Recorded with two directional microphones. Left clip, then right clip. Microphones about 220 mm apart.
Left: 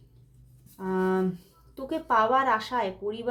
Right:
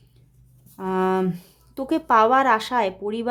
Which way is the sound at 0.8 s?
40° right (ahead or behind).